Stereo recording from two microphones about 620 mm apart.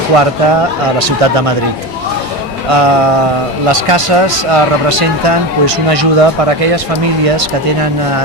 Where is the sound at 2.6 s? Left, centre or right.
Right.